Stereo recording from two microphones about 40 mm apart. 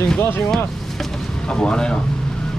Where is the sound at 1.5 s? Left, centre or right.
Left.